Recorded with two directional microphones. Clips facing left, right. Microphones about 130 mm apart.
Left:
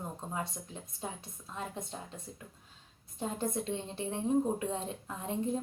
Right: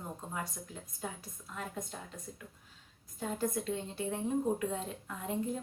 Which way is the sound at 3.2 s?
25° left (ahead or behind).